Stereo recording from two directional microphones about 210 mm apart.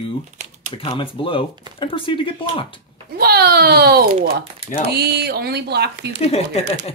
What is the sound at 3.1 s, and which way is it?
Speech, 50° right (ahead or behind).